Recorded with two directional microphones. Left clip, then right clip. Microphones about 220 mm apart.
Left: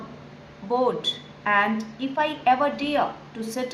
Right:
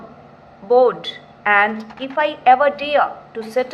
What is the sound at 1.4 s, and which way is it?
A woman's voice, 20° right (ahead or behind).